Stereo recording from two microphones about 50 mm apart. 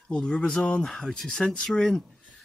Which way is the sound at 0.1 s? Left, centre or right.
Centre.